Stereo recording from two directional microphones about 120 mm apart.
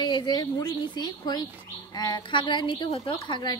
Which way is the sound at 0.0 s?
35° left (ahead or behind).